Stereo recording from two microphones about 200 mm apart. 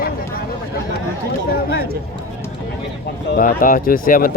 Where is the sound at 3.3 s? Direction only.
45° left (ahead or behind).